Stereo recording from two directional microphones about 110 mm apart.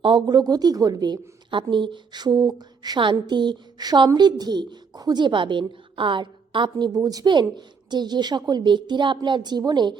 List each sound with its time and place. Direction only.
0.0 s a woman's voice: 45° right (ahead or behind)